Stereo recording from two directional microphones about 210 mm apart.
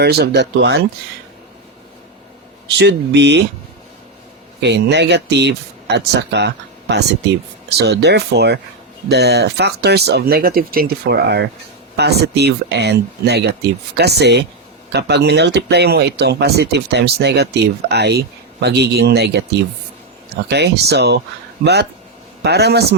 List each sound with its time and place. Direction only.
0.0 s speech: 50° right (ahead or behind)
2.7 s speech: 55° right (ahead or behind)
4.6 s speech: 55° right (ahead or behind)